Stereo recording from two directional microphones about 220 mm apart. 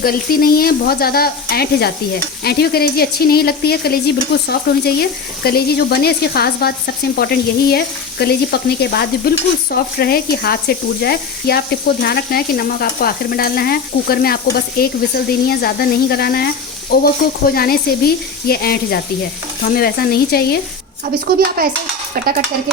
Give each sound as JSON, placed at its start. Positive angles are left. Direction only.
{"t": 0.0, "sound": "stir", "side_deg": 40}
{"t": 21.0, "sound": "a child's voice", "side_deg": -40}
{"t": 22.1, "sound": "cutlery", "side_deg": -40}